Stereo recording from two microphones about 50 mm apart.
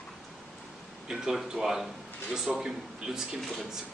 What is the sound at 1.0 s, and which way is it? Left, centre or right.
Speech, centre.